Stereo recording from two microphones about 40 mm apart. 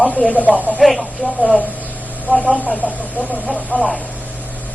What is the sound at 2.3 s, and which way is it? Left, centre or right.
Speech, right.